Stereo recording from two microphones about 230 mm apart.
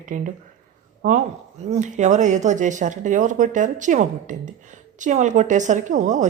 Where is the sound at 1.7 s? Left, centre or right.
Right.